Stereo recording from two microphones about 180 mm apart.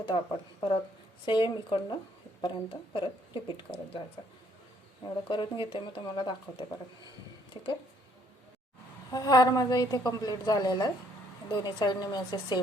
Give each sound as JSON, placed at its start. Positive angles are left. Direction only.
{"t": 0.1, "sound": "a woman's voice", "side_deg": 25}
{"t": 5.0, "sound": "a woman's voice", "side_deg": 25}
{"t": 9.1, "sound": "a woman's voice", "side_deg": 20}